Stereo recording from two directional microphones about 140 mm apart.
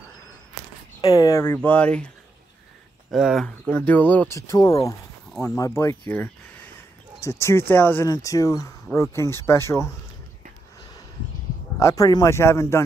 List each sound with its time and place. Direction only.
1.0 s speech: 25° left (ahead or behind); by 2.0 s 10° left (ahead or behind)
3.1 s speech: centre (ahead or behind)
3.4 s speech: 10° left (ahead or behind)
5.3 s speech: 5° left (ahead or behind)
5.6 s speech: 20° left (ahead or behind)
11.8 s speech: 25° left (ahead or behind)